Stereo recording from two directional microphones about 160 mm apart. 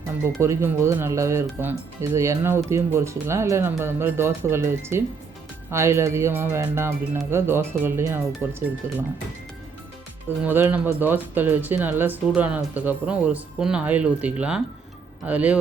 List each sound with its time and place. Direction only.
0.3 s speech: 15° right (ahead or behind)
10.4 s speech: 10° right (ahead or behind)